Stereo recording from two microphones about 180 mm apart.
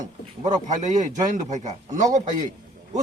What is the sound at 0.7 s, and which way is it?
A man's voice, 40° right (ahead or behind).